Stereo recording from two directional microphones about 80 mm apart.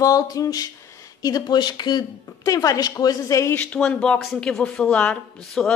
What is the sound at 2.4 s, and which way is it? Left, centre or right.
Speech, left.